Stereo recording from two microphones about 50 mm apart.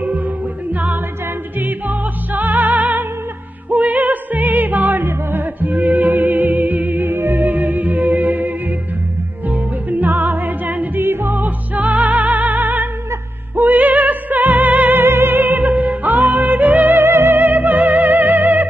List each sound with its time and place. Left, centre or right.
1.6 s music: right
9.5 s music: right
11.0 s music: right
17.0 s music: right